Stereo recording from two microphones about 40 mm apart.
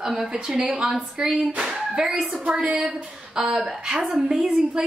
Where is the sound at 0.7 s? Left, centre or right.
Right.